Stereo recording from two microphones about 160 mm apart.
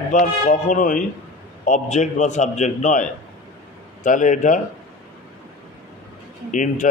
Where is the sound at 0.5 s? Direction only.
55° left (ahead or behind).